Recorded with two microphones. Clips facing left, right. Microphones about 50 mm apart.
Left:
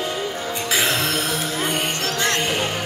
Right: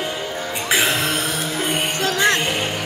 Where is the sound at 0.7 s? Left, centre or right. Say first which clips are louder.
Right 2 dB; right.